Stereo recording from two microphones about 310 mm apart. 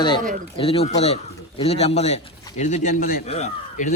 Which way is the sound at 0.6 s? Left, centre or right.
Centre.